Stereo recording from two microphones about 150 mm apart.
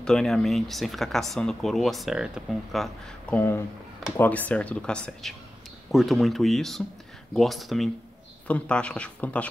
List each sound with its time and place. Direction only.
0.0 s speech: 5° left (ahead or behind)
3.3 s speech: 15° left (ahead or behind)